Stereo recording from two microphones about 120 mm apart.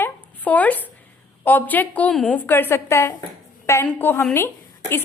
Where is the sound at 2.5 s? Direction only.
15° left (ahead or behind).